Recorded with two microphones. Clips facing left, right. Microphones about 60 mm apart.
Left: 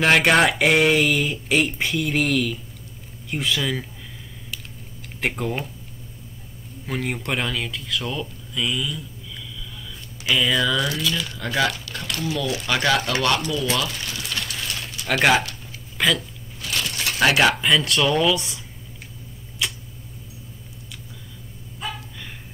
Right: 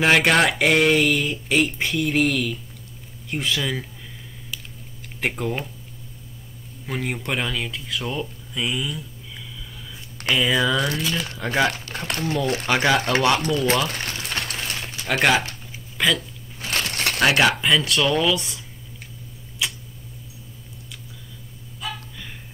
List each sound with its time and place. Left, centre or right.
0.0 s speech: centre
5.2 s speech: centre
6.9 s speech: centre
10.3 s speech: centre
10.8 s speech: right
11.3 s speech: right
12.2 s speech: right
12.6 s speech: right
13.4 s speech: right
13.8 s a sound: right
15.0 s speech: centre
16.6 s a sound: right
17.2 s speech: centre
19.6 s tick-tock: centre